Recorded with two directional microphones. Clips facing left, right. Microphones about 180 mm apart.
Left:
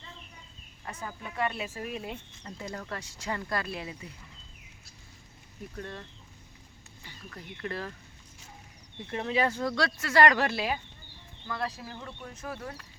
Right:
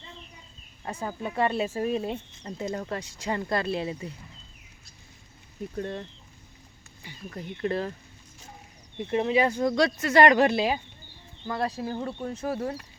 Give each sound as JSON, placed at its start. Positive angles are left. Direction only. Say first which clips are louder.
{"t": 0.9, "sound": "speech", "louder": "right 7 dB", "side_deg": -30}
{"t": 5.7, "sound": "speech", "louder": "right 8 dB", "side_deg": -25}
{"t": 9.0, "sound": "speech", "louder": "right 6 dB", "side_deg": -20}